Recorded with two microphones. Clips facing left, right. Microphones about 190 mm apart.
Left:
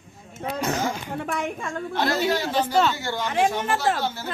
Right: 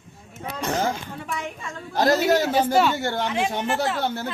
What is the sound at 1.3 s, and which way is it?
Speech, 50° left (ahead or behind).